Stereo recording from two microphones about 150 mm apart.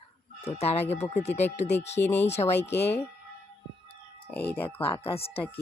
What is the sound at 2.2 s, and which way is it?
Speech, 45° left (ahead or behind).